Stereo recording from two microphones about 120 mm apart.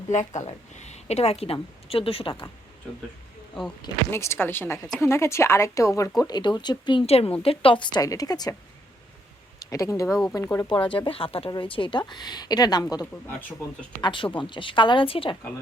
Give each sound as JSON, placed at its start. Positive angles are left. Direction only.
{"t": 0.1, "sound": "a woman's voice", "side_deg": 75}
{"t": 4.1, "sound": "a woman's voice", "side_deg": 20}
{"t": 6.2, "sound": "speech", "side_deg": 40}
{"t": 7.0, "sound": "a woman's voice", "side_deg": 55}
{"t": 9.6, "sound": "a woman's voice", "side_deg": 25}
{"t": 10.9, "sound": "a woman's voice", "side_deg": 45}